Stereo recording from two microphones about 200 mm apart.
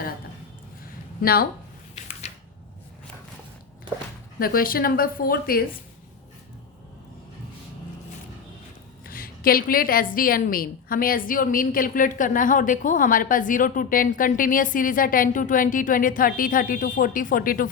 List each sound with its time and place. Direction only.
1.2 s a woman's voice: 50° left (ahead or behind)
2.2 s a sound: 35° left (ahead or behind)
4.4 s a woman's voice: 45° left (ahead or behind)
9.0 s a woman's voice: 45° left (ahead or behind)